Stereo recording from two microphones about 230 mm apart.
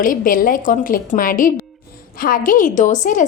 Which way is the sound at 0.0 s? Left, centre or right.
Left.